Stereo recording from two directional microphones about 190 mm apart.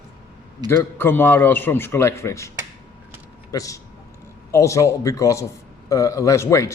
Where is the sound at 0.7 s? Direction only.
10° left (ahead or behind).